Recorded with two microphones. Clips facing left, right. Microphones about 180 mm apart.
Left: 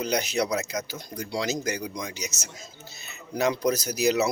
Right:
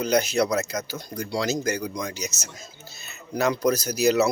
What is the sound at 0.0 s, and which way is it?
Speech, 15° left (ahead or behind).